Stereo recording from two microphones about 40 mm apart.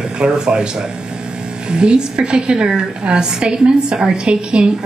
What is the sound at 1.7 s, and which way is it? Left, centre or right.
A woman's voice, right.